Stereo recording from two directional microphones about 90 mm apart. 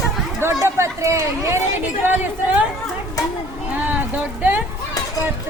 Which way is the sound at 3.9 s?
20° right (ahead or behind).